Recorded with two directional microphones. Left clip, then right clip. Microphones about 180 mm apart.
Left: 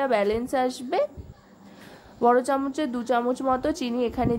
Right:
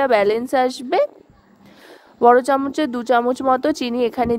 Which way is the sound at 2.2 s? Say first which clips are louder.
Right 8 dB; 45° right (ahead or behind).